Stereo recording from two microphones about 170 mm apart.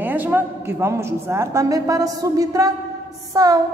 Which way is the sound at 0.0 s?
10° right (ahead or behind).